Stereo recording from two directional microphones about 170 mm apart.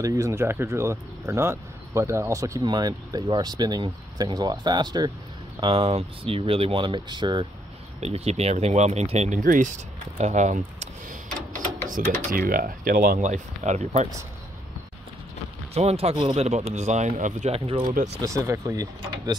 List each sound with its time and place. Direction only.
0.0 s speech: 20° right (ahead or behind)
8.0 s speech: 40° right (ahead or behind)
9.4 s a sound: 50° right (ahead or behind)
12.3 s speech: 55° right (ahead or behind)
15.7 s speech: 40° right (ahead or behind)
17.8 s speech: 50° right (ahead or behind)
18.2 s speech: 20° right (ahead or behind)